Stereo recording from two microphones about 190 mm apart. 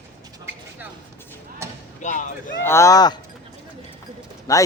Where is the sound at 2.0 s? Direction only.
40° left (ahead or behind).